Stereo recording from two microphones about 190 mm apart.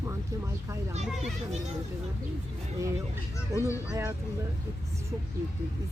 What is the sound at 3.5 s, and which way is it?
Speech, 15° left (ahead or behind).